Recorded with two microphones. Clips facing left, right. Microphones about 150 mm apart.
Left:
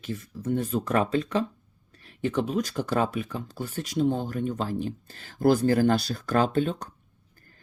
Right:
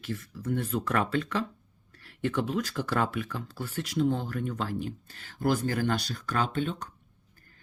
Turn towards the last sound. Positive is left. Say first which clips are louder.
# left 3 dB
turn(degrees=40)  # may be behind; listen again after turning